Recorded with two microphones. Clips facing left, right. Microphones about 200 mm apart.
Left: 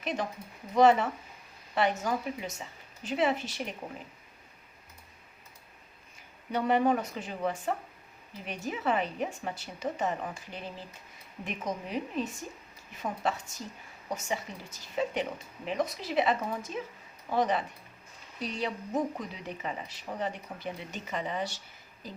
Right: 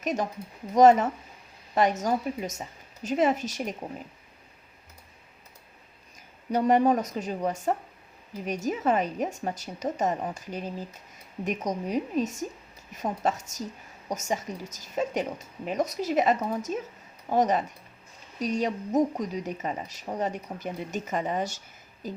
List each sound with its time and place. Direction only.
0.0 s a woman's voice: 45° right (ahead or behind)
6.5 s a woman's voice: 40° right (ahead or behind)